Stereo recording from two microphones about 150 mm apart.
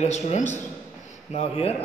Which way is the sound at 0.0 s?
50° left (ahead or behind).